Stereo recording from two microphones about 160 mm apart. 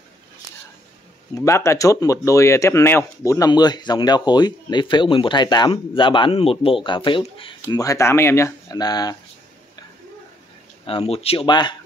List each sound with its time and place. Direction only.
1.3 s speech: 20° left (ahead or behind); by 7.8 s 35° left (ahead or behind)
7.8 s speech: 20° left (ahead or behind)
10.9 s speech: 35° left (ahead or behind)